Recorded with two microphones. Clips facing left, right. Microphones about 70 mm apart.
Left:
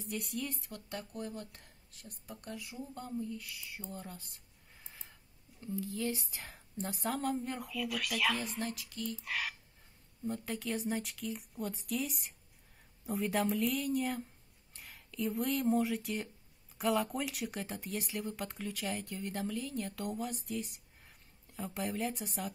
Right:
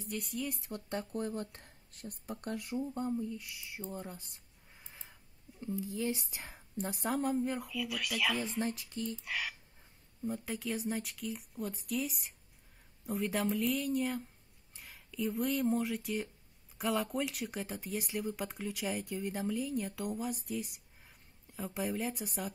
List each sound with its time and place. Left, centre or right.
0.0 s speech: centre
0.6 s speech: right
2.9 s speech: right
5.6 s speech: centre
6.4 s a sound: centre
7.1 s speech: centre
8.5 s speech: right
9.2 s speech: centre